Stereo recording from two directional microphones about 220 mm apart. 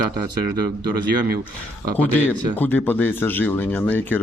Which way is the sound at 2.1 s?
10° left (ahead or behind).